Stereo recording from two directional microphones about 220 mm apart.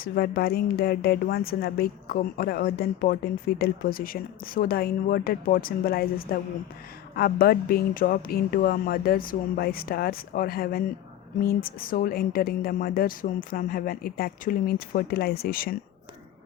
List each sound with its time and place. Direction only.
0.0 s speech: 45° left (ahead or behind)